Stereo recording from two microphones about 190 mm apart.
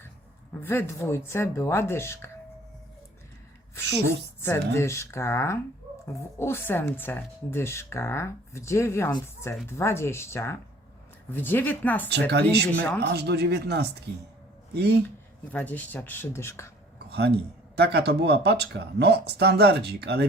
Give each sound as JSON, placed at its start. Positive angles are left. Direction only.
{"t": 0.6, "sound": "speech", "side_deg": 10}
{"t": 4.4, "sound": "speech", "side_deg": 15}
{"t": 12.0, "sound": "speech", "side_deg": -65}
{"t": 15.5, "sound": "speech", "side_deg": 10}
{"t": 17.1, "sound": "a man's voice", "side_deg": -60}